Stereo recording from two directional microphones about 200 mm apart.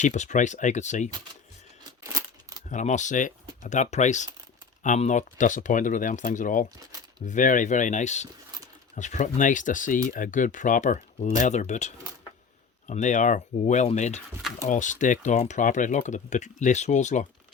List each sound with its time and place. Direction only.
0.0 s speech: 35° left (ahead or behind)
2.6 s speech: 40° left (ahead or behind)